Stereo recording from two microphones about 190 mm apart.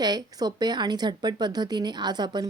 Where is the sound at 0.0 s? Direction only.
20° right (ahead or behind).